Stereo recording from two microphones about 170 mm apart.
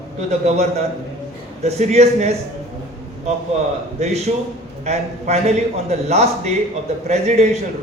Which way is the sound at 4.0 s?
40° right (ahead or behind).